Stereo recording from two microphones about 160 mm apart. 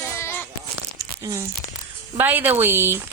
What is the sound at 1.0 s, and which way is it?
Tearing, 20° right (ahead or behind).